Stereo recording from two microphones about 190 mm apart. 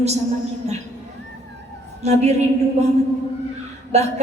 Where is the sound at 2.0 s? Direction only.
35° right (ahead or behind).